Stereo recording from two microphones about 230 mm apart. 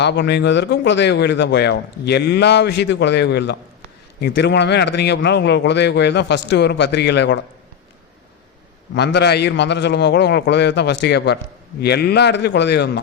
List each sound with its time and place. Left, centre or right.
0.0 s a man's voice: left
9.0 s a man's voice: left